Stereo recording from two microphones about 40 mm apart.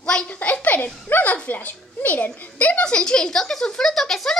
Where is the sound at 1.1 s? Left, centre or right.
Left.